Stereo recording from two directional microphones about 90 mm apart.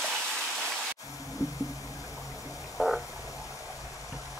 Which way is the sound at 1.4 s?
40° left (ahead or behind).